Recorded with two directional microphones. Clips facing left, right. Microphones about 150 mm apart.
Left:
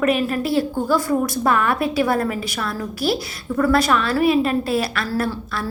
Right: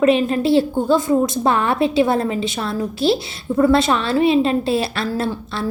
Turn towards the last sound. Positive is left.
turn(degrees=-25)  # may be behind; listen again after turning